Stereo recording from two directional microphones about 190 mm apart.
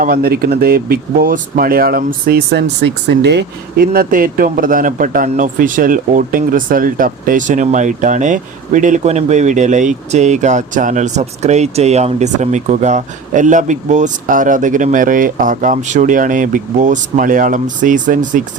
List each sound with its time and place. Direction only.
0.0 s speech: 50° right (ahead or behind)